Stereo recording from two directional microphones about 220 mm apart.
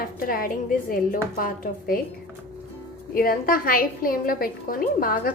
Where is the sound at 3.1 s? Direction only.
40° left (ahead or behind).